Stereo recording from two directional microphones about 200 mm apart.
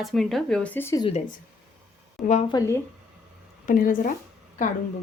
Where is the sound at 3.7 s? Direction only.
40° left (ahead or behind).